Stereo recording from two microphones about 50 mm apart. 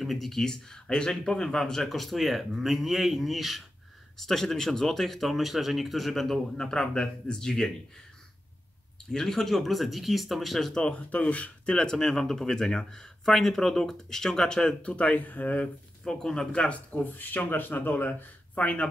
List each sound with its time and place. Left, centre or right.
0.0 s speech: centre
9.1 s speech: centre
10.7 s speech: centre
11.1 s speech: left
11.7 s speech: centre; by 15.7 s left
16.0 s speech: centre
16.6 s speech: left